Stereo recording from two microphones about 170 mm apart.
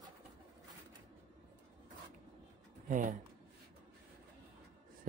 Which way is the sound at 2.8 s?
50° right (ahead or behind).